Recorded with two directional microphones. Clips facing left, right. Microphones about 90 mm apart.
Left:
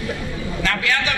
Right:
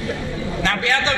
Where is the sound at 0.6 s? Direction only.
30° right (ahead or behind).